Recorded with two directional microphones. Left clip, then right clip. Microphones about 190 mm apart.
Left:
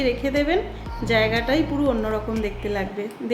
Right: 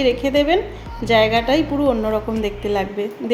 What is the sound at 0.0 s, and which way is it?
Speech, 15° right (ahead or behind).